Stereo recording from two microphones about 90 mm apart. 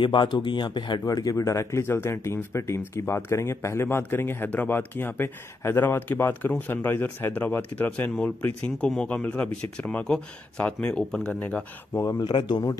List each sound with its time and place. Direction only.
0.0 s speech: 60° left (ahead or behind)
1.0 s speech: 45° left (ahead or behind); by 8.1 s 20° left (ahead or behind)
8.6 s speech: 10° left (ahead or behind)
11.3 s speech: 20° left (ahead or behind)
12.2 s speech: 55° left (ahead or behind)